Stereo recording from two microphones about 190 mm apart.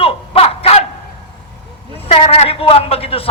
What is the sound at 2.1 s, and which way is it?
Speech, 30° left (ahead or behind).